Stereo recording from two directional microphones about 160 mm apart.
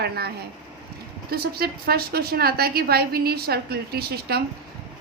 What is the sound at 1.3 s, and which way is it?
A woman's voice, 75° right (ahead or behind).